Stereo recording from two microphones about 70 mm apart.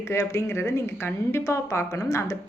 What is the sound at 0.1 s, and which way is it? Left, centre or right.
A woman's voice, left.